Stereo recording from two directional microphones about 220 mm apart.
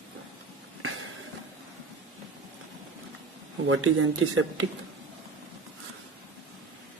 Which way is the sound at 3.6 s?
65° right (ahead or behind).